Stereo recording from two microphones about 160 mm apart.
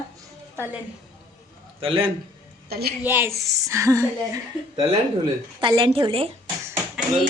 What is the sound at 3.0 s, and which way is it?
A woman's voice, 15° right (ahead or behind).